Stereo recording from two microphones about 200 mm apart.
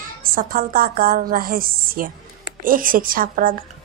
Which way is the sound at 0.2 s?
45° right (ahead or behind).